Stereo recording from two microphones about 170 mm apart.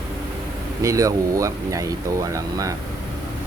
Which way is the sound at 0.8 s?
20° right (ahead or behind).